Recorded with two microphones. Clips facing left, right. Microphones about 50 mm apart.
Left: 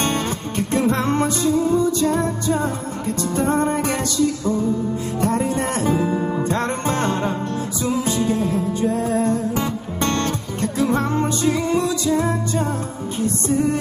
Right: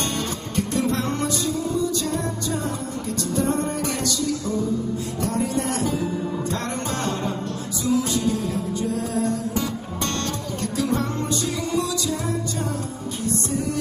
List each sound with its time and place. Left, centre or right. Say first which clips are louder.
0.0 s music: left 5 dB; left